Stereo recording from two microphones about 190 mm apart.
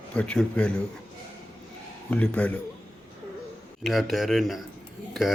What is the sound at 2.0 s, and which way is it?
Speech, 5° left (ahead or behind).